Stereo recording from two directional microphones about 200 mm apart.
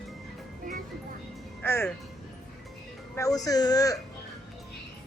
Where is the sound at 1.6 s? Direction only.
10° left (ahead or behind).